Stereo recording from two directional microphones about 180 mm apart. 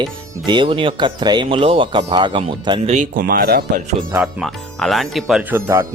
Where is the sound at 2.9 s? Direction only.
45° right (ahead or behind).